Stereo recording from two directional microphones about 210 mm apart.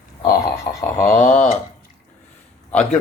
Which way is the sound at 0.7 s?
15° left (ahead or behind).